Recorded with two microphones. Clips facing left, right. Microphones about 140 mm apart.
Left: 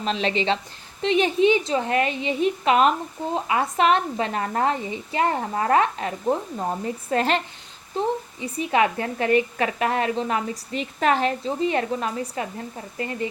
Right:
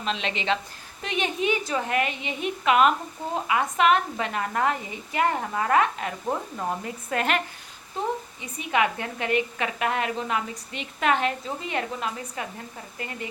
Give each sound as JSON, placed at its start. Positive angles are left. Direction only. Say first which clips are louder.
{"t": 0.0, "sound": "a woman's voice", "louder": "left 5 dB", "side_deg": 35}